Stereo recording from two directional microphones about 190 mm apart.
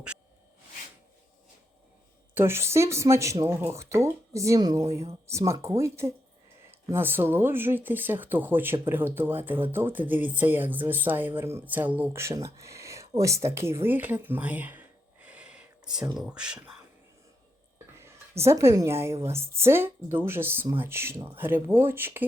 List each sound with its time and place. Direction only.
2.3 s speech: 10° right (ahead or behind)
12.5 s a sound: 15° right (ahead or behind)
16.1 s speech: 5° right (ahead or behind)
18.0 s a woman's voice: 15° right (ahead or behind)